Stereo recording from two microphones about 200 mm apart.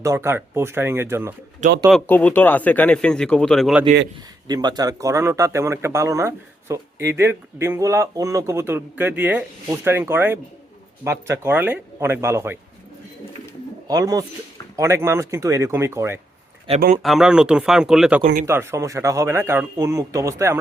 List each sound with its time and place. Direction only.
0.0 s speech: 15° right (ahead or behind)
1.9 s speech: 10° left (ahead or behind)
4.4 s speech: 20° right (ahead or behind)
13.8 s speech: 20° right (ahead or behind)
17.0 s speech: centre (ahead or behind)
18.4 s speech: 15° right (ahead or behind)